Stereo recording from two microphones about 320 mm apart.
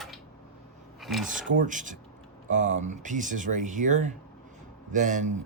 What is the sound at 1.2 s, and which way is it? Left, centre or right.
Speech, right.